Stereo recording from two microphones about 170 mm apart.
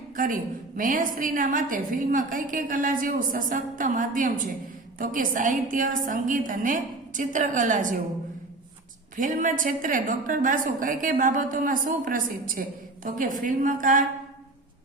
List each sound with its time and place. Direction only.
0.2 s a woman's voice: 50° right (ahead or behind)
9.1 s a woman's voice: 50° right (ahead or behind)